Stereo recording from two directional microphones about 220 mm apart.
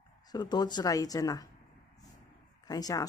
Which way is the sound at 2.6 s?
15° left (ahead or behind).